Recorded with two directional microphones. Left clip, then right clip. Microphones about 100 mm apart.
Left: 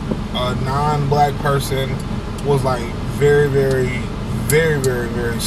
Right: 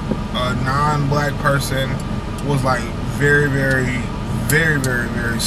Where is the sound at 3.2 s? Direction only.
15° right (ahead or behind).